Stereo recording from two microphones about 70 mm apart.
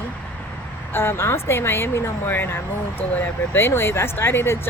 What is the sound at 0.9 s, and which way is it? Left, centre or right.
A woman's voice, left.